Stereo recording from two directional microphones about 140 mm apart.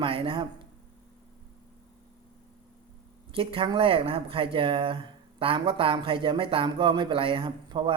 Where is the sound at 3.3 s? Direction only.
40° right (ahead or behind).